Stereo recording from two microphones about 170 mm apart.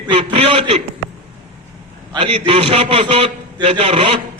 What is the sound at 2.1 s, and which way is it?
A man's voice, 30° right (ahead or behind).